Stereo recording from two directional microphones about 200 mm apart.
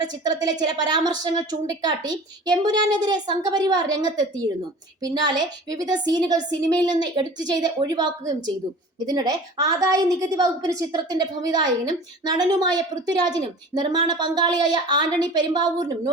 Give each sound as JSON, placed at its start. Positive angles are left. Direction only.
{"t": 0.3, "sound": "a woman's voice", "side_deg": -20}
{"t": 5.0, "sound": "a woman's voice", "side_deg": -20}